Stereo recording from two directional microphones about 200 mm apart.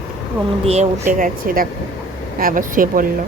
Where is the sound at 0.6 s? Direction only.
35° right (ahead or behind).